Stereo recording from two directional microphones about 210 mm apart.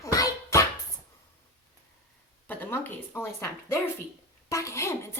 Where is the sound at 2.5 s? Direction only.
10° left (ahead or behind).